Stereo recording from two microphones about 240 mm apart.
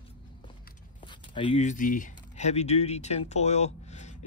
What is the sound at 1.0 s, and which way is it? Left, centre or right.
Speech, centre.